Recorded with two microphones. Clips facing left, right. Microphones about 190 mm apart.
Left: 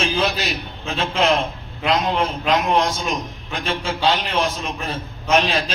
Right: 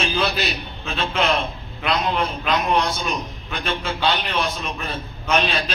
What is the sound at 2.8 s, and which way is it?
A man's voice, 90° left.